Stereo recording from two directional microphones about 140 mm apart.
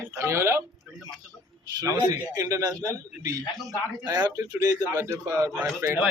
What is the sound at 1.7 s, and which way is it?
A man's voice, 25° right (ahead or behind).